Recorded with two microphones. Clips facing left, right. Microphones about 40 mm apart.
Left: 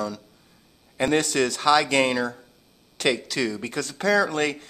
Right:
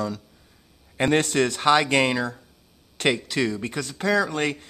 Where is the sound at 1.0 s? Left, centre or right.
Right.